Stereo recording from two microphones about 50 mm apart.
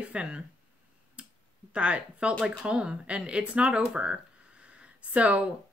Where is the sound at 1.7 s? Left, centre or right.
Right.